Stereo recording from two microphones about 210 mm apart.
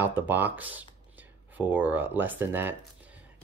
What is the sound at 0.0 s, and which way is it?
Speech, 10° right (ahead or behind).